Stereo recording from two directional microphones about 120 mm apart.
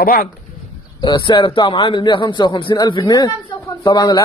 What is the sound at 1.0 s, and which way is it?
A man's voice, 40° left (ahead or behind).